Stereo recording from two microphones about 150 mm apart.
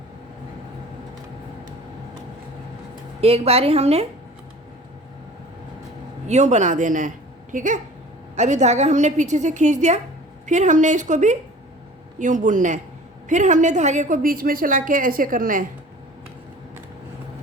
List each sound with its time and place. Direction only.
3.2 s a woman's voice: 40° right (ahead or behind)
6.2 s a woman's voice: 50° right (ahead or behind)